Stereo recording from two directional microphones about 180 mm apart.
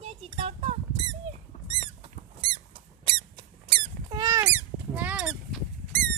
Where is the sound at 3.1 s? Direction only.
30° right (ahead or behind).